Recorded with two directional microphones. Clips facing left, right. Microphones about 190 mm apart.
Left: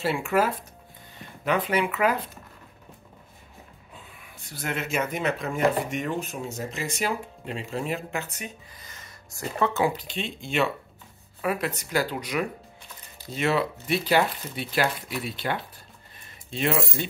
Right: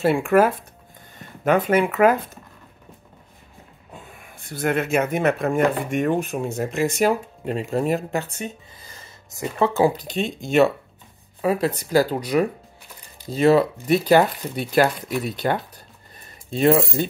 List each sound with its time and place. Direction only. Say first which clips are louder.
0.0 s speech: right 7 dB; 55° right (ahead or behind)
3.9 s speech: right 7 dB; 45° right (ahead or behind)
11.4 s speech: right 6 dB; 30° right (ahead or behind)